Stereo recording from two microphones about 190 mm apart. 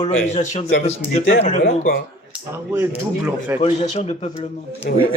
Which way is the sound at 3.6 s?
35° left (ahead or behind).